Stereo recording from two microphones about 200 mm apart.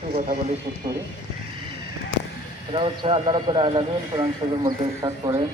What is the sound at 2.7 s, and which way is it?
Speech, 25° right (ahead or behind).